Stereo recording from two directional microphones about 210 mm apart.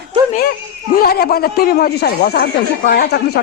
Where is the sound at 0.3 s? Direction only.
45° left (ahead or behind).